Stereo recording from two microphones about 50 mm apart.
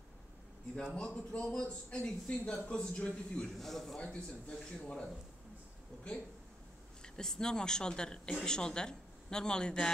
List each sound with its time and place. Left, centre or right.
0.9 s a man's voice: left
2.2 s a man's voice: left
3.5 s a man's voice: centre
4.0 s a man's voice: left
7.0 s a man's voice: centre